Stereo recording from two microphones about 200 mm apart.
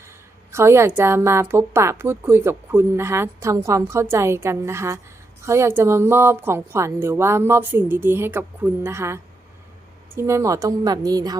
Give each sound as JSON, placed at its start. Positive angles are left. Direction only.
{"t": 0.5, "sound": "a woman's voice", "side_deg": -15}